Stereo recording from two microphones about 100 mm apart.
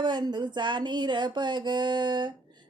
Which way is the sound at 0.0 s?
45° right (ahead or behind).